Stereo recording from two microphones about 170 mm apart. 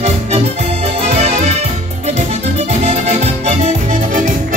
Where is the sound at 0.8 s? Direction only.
40° right (ahead or behind).